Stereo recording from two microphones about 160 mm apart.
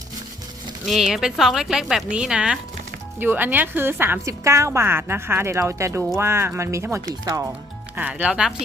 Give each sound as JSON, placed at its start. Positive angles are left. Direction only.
{"t": 0.9, "sound": "a woman's voice", "side_deg": 0}
{"t": 7.9, "sound": "a woman's voice", "side_deg": -10}